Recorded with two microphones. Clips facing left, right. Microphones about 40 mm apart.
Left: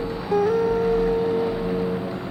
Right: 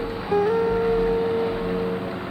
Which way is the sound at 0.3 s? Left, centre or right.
Centre.